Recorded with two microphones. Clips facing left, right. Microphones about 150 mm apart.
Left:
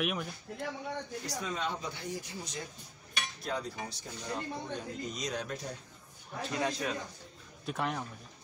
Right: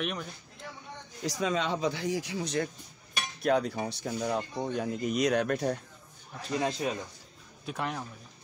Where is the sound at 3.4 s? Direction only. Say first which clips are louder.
Right 11 dB; 65° right (ahead or behind).